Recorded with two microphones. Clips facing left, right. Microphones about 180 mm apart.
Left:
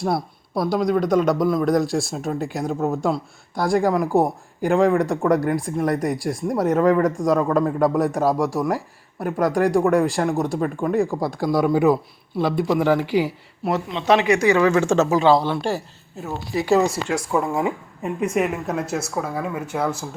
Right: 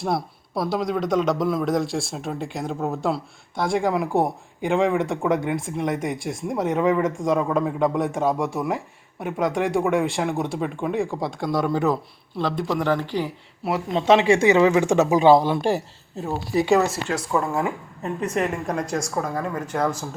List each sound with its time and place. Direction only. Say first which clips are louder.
0.0 s a man's voice: left 2 dB; centre (ahead or behind)
14.0 s speech: right 1 dB; 25° right (ahead or behind)
16.2 s speech: right 2 dB; 35° right (ahead or behind)
16.6 s a man's voice: left 2 dB; centre (ahead or behind)
17.4 s a woman's voice: left 2 dB; 15° left (ahead or behind)